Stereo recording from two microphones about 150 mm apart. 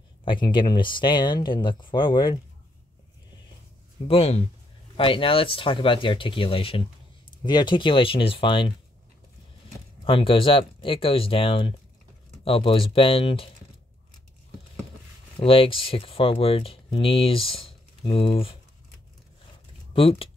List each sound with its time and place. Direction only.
0.2 s speech: 35° left (ahead or behind)
4.1 s speech: 45° left (ahead or behind)
10.0 s speech: 35° left (ahead or behind)
15.3 s speech: 40° left (ahead or behind)
19.9 s speech: 40° left (ahead or behind)